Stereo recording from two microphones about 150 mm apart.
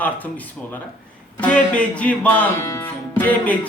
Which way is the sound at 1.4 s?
10° left (ahead or behind).